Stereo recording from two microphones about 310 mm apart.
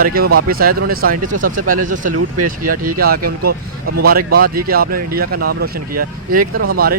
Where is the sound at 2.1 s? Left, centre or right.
Right.